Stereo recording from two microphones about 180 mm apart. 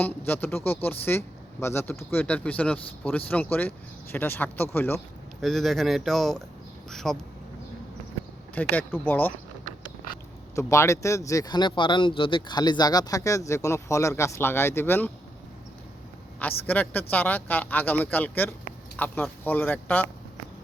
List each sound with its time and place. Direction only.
0.0 s speech: 10° left (ahead or behind)
5.4 s speech: centre (ahead or behind)
8.5 s speech: 10° left (ahead or behind)
10.5 s speech: 15° left (ahead or behind)
16.4 s speech: 10° left (ahead or behind)